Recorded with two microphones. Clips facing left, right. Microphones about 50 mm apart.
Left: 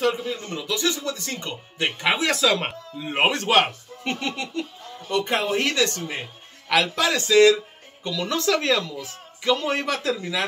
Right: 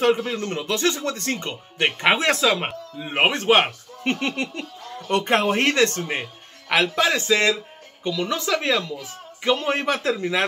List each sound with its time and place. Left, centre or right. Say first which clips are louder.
0.0 s speech: right 4 dB; right
2.4 s speech: right 1 dB; centre; by 4.6 s right
5.0 s speech: right 4 dB; right
6.7 s speech: right 1 dB; right
9.4 s speech: right 1 dB; right